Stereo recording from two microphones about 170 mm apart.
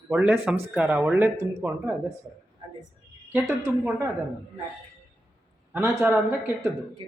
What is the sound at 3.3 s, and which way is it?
Speech, 10° right (ahead or behind).